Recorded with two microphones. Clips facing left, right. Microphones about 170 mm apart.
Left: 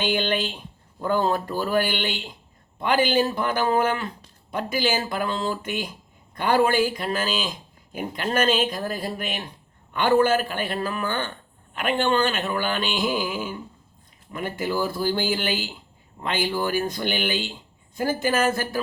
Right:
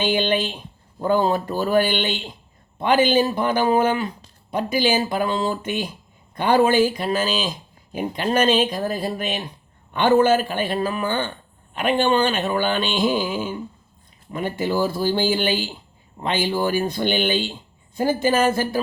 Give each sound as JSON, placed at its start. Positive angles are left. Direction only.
{"t": 0.0, "sound": "speech", "side_deg": -20}